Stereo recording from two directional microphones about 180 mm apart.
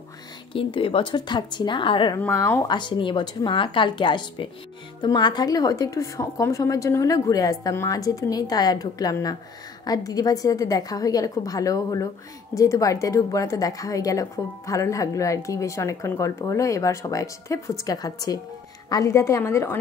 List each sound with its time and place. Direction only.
0.5 s a woman's voice: 30° left (ahead or behind)
2.1 s a woman's voice: 10° left (ahead or behind)
2.7 s a woman's voice: 25° left (ahead or behind)